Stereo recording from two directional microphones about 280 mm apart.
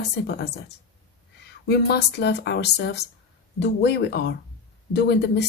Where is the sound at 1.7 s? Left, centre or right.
Left.